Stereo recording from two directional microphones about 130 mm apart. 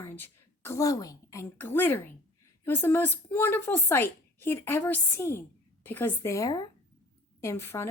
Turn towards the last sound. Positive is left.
turn(degrees=20)  # may be behind; listen again after turning